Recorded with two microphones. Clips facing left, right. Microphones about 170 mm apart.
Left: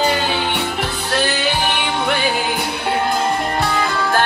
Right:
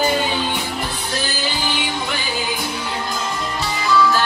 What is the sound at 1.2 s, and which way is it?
Music, 65° left (ahead or behind).